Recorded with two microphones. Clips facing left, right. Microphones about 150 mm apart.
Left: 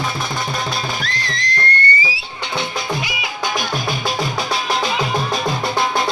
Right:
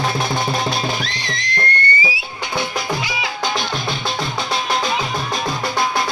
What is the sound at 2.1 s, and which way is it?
Music, 25° left (ahead or behind).